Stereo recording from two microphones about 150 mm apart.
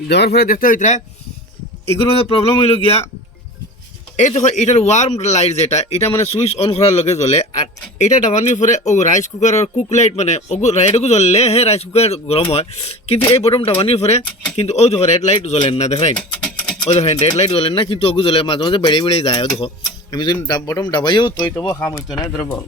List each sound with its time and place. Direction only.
0.2 s speech: 90° left; by 1.0 s 55° left (ahead or behind)
1.9 s speech: 40° left (ahead or behind)
4.4 s speech: 50° left (ahead or behind)
16.1 s a sound: 10° left (ahead or behind)
16.8 s speech: 45° left (ahead or behind)
19.8 s speech: 25° left (ahead or behind)
21.8 s speech: 5° left (ahead or behind)